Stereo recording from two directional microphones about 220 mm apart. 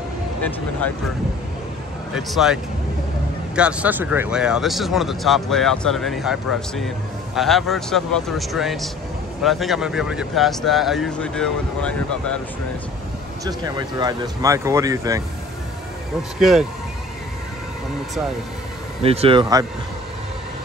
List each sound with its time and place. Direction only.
0.4 s speech: 5° left (ahead or behind)
2.1 s speech: centre (ahead or behind)
13.4 s speech: 15° right (ahead or behind)
16.3 s speech: centre (ahead or behind)
19.0 s speech: 25° right (ahead or behind)